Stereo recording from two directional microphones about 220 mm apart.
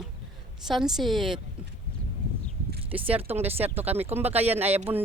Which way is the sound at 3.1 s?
25° right (ahead or behind).